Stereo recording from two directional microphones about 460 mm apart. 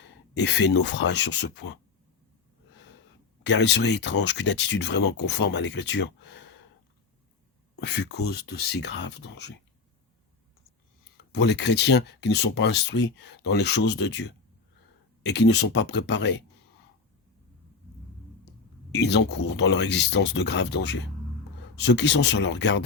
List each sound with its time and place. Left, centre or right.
0.0 s speech: left
3.4 s speech: left
7.8 s speech: left
11.2 s speech: left
18.4 s speech: left